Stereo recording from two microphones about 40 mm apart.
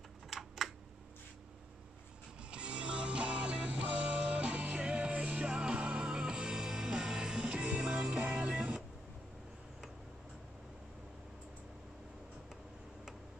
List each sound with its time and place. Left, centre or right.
0.3 s typing: centre
2.5 s music: right
8.2 s music: right